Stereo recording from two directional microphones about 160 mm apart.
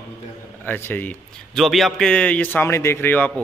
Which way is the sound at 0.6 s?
15° left (ahead or behind).